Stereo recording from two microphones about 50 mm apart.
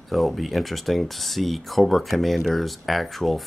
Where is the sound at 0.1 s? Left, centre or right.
Centre.